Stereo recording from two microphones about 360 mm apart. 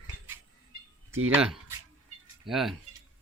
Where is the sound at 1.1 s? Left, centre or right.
Right.